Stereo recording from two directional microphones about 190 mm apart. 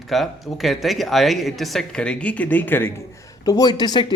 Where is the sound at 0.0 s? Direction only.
Centre (ahead or behind).